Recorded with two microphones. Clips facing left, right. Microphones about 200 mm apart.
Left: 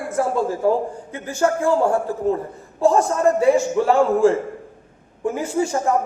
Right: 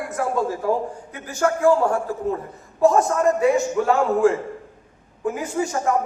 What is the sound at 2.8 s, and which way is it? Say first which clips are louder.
A man's voice: left 1 dB; 30° left (ahead or behind).